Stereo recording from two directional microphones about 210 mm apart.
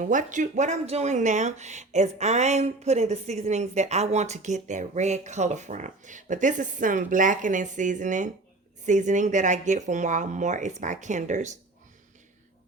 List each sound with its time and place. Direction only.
0.1 s speech: 35° right (ahead or behind)